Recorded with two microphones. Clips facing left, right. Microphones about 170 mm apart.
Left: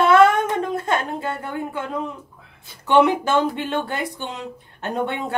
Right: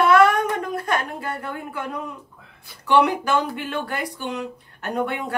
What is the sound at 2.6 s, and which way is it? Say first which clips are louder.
Speech: left 2 dB; 25° left (ahead or behind).